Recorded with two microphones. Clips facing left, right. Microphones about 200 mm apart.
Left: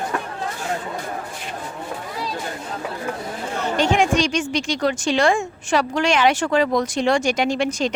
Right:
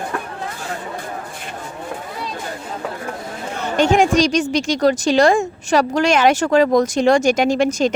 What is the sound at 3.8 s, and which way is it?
A woman's voice, 45° right (ahead or behind).